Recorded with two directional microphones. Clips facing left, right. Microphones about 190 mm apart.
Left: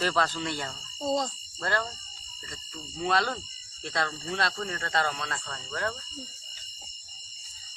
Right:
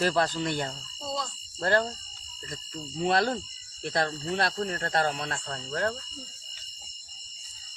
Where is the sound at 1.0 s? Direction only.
45° left (ahead or behind).